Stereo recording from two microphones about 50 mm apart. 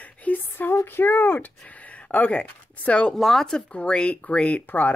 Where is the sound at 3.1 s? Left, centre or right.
Centre.